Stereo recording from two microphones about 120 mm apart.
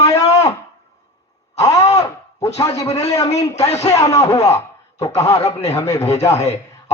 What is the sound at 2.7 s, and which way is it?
Speech, 30° left (ahead or behind).